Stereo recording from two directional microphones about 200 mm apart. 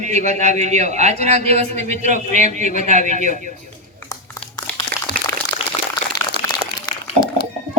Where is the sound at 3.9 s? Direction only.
15° left (ahead or behind).